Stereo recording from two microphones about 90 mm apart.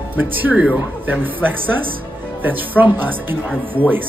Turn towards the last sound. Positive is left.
turn(degrees=-20)  # may be behind; listen again after turning